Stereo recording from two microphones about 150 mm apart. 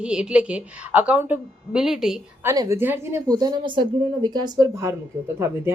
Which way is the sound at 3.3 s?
25° right (ahead or behind).